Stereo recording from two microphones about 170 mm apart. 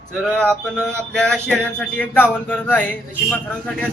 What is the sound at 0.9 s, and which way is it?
A man's voice, 5° left (ahead or behind).